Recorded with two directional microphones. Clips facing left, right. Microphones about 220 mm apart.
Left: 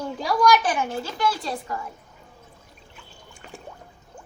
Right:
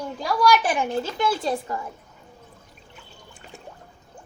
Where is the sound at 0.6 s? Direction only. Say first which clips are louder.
Right 2 dB; 20° right (ahead or behind).